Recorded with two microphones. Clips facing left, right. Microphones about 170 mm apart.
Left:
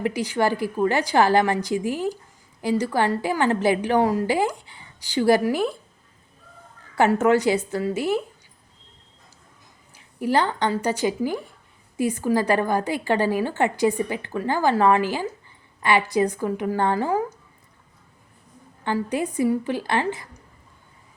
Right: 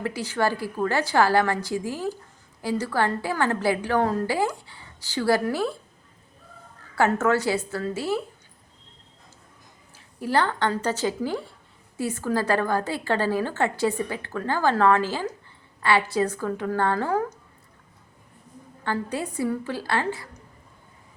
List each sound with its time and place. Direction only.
0.0 s a woman's voice: 15° left (ahead or behind)
7.1 s a woman's voice: 15° left (ahead or behind)
10.2 s a woman's voice: 15° left (ahead or behind)
18.9 s a woman's voice: 15° left (ahead or behind)